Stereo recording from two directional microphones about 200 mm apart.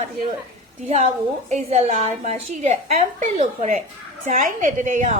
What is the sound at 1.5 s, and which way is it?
A woman's voice, 35° right (ahead or behind).